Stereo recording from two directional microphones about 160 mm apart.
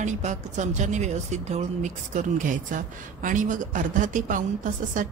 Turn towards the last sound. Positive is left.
turn(degrees=-55)  # may be behind; listen again after turning